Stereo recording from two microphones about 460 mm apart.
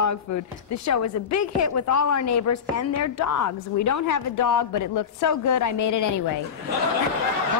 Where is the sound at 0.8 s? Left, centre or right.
Left.